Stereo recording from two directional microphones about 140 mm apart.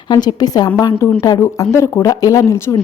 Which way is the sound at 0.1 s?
30° left (ahead or behind).